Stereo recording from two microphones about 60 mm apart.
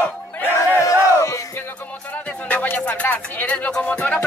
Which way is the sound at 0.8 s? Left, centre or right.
Left.